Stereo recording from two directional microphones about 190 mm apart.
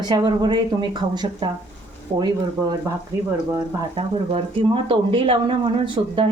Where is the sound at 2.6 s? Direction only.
10° right (ahead or behind).